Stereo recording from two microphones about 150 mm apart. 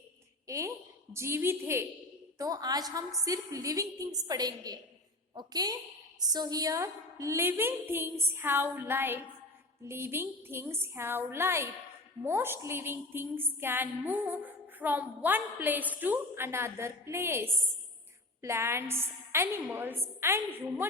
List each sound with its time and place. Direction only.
0.4 s a woman's voice: 20° right (ahead or behind)